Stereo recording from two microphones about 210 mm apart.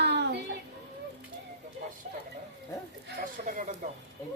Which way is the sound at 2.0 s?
40° right (ahead or behind).